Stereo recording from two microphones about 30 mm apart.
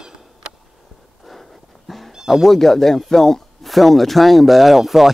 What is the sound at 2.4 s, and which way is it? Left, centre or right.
Speech, centre.